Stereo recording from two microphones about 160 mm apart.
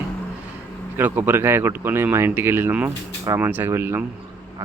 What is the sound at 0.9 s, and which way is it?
Speech, 10° right (ahead or behind).